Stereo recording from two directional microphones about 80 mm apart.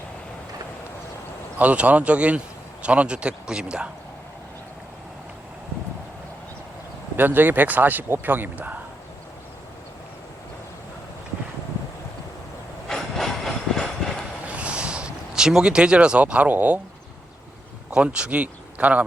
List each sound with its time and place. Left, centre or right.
1.5 s speech: centre
7.2 s speech: right
12.9 s train: centre
14.4 s a sound: centre
17.9 s speech: centre